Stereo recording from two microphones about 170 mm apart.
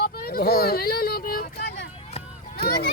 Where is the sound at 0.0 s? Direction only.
65° left (ahead or behind).